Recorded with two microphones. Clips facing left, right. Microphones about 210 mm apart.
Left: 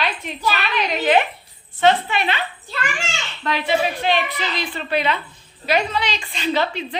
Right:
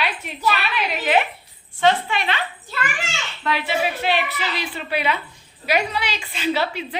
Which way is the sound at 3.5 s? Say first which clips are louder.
Left 2 dB; 5° right (ahead or behind).